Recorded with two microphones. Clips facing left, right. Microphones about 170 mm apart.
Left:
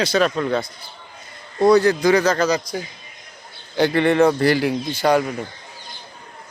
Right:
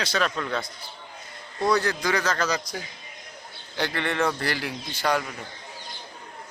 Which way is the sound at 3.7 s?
15° left (ahead or behind).